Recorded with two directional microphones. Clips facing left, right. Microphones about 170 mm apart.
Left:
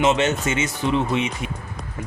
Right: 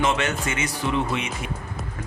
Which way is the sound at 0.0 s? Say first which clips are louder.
Left 4 dB; 25° left (ahead or behind).